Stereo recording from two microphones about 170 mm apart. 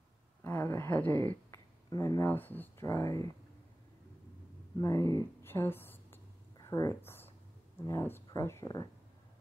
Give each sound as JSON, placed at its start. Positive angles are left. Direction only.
{"t": 0.4, "sound": "a sound", "side_deg": 10}
{"t": 1.9, "sound": "speech", "side_deg": 20}
{"t": 4.7, "sound": "speech", "side_deg": 15}